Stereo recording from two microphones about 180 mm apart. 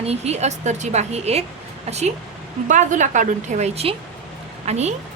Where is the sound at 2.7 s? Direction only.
45° right (ahead or behind).